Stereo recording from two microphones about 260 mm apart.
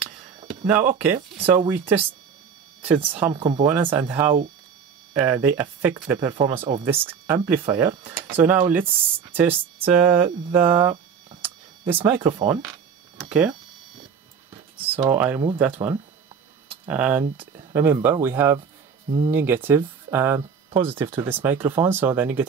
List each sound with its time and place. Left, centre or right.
1.0 s speech: centre
3.3 s speech: centre
11.4 s a sound: centre
12.1 s speech: centre
13.3 s speech: centre
15.0 s speech: centre
19.0 s speech: right
19.3 s speech: centre